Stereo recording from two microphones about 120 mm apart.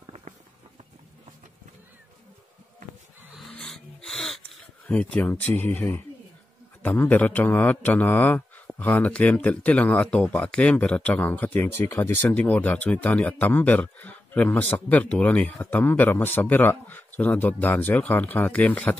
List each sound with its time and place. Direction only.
0.0 s a sound: 65° right (ahead or behind)
3.3 s dog: 5° left (ahead or behind)
4.8 s speech: 10° left (ahead or behind)